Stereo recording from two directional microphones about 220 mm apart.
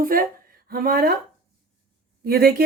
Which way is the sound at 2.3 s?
45° right (ahead or behind).